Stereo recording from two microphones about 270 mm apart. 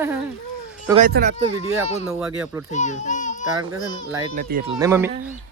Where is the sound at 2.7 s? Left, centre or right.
Left.